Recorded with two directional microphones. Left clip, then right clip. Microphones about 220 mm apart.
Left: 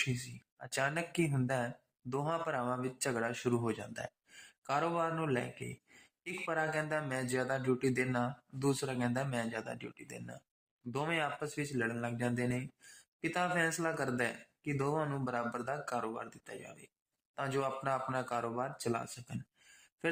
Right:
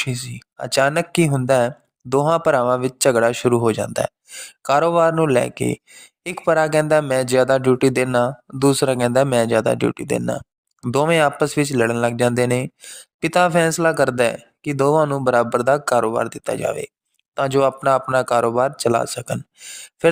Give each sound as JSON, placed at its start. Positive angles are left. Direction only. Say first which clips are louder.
{"t": 0.5, "sound": "speech", "louder": "right 18 dB", "side_deg": -50}